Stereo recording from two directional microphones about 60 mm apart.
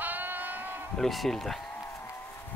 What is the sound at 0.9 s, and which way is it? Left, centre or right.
Speech, centre.